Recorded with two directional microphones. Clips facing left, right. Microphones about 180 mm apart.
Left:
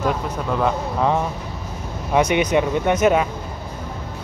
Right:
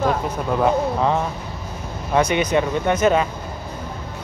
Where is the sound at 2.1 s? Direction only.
15° left (ahead or behind).